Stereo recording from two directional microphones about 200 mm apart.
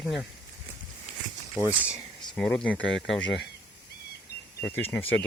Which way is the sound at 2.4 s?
5° left (ahead or behind).